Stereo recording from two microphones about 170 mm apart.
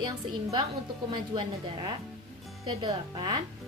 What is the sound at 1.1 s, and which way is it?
A woman's voice, 25° right (ahead or behind).